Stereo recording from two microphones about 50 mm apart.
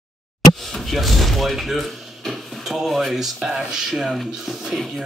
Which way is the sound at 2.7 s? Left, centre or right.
Centre.